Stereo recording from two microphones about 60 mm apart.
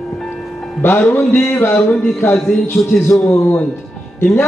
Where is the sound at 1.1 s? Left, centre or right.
Left.